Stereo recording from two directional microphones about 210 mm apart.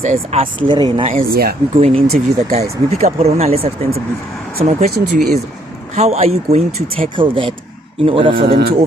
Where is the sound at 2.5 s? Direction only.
30° right (ahead or behind).